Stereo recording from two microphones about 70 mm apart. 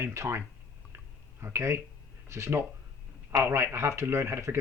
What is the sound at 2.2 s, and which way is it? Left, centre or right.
Speech, right.